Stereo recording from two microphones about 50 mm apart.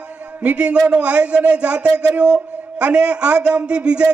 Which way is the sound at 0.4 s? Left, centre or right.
Right.